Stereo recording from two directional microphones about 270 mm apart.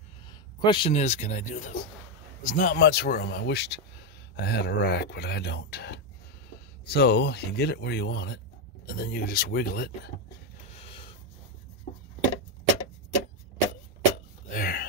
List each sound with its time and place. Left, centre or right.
0.3 s speech: centre; by 9.8 s left
10.8 s snort: centre
14.5 s a sound: left